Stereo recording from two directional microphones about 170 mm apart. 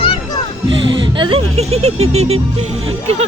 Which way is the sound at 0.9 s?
30° right (ahead or behind).